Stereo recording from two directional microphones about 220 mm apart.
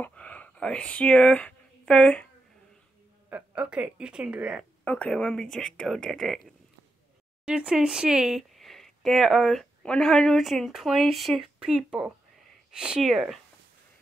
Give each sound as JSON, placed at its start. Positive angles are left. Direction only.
{"t": 0.0, "sound": "a sound", "side_deg": 5}
{"t": 3.3, "sound": "speech", "side_deg": -5}
{"t": 4.8, "sound": "speech", "side_deg": 5}